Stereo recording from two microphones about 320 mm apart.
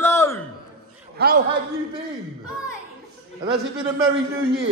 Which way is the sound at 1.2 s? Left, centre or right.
Right.